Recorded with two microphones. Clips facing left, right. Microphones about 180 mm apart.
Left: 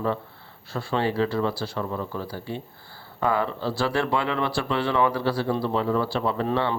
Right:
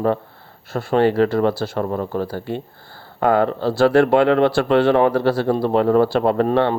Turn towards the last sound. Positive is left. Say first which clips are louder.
# right 8 dB
turn(degrees=-55)  # may be behind; listen again after turning